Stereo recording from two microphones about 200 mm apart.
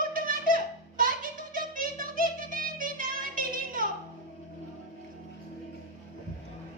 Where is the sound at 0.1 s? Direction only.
45° right (ahead or behind).